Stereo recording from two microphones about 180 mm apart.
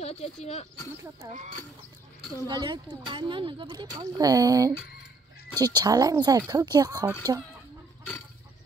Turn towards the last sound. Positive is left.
turn(degrees=-20)  # may be behind; listen again after turning